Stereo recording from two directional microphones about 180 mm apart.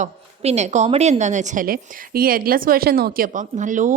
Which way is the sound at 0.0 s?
40° right (ahead or behind).